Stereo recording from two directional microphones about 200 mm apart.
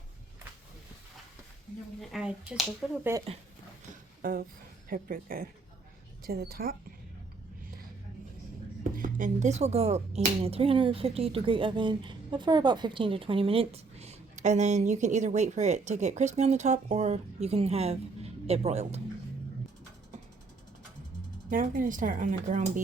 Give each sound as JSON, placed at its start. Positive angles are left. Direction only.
{"t": 2.0, "sound": "speech", "side_deg": -5}
{"t": 4.2, "sound": "a woman's voice", "side_deg": -45}
{"t": 8.8, "sound": "speech", "side_deg": -40}
{"t": 21.5, "sound": "speech", "side_deg": -40}